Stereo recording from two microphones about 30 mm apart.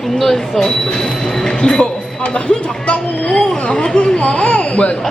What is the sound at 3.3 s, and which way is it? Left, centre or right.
Speech, left.